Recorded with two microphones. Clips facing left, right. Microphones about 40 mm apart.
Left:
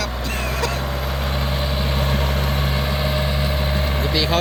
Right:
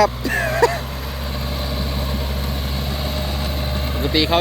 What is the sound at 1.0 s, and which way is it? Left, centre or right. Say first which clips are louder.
Vehicle: left 4 dB; left.